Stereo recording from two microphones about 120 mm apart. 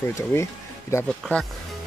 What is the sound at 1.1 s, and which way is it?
Speech, 5° left (ahead or behind).